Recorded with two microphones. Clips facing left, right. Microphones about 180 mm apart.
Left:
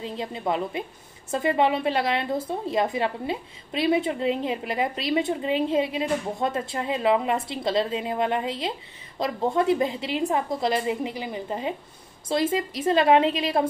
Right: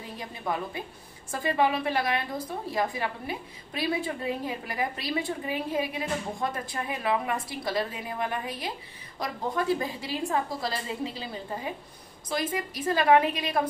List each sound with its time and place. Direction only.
0.0 s a woman's voice: 25° left (ahead or behind)